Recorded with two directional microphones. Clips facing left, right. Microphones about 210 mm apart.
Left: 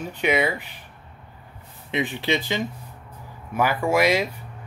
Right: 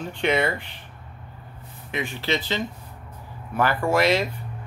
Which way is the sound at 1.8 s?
20° left (ahead or behind).